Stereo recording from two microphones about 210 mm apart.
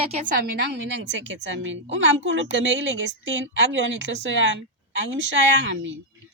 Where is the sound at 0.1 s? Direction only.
45° right (ahead or behind); by 4.4 s 60° right (ahead or behind).